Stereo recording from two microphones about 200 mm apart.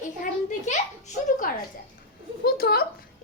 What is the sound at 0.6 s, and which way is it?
Speech, 35° left (ahead or behind).